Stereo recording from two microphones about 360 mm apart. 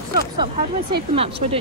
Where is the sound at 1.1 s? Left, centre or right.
Centre.